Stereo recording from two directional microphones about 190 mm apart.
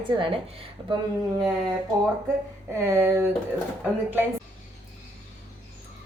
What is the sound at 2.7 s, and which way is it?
Speech, 15° right (ahead or behind).